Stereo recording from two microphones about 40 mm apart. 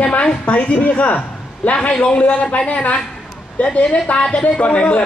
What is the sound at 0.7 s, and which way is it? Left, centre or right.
A man's voice, left.